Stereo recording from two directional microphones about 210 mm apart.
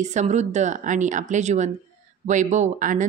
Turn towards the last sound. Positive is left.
turn(degrees=-35)  # may be behind; listen again after turning